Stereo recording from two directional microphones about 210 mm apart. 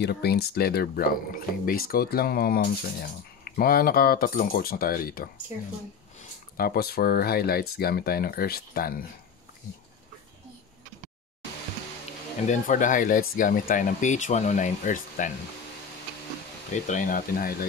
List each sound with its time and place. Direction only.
0.0 s speech: 50° left (ahead or behind)
6.5 s speech: 45° left (ahead or behind)
12.4 s speech: 40° left (ahead or behind)
16.7 s speech: 35° left (ahead or behind)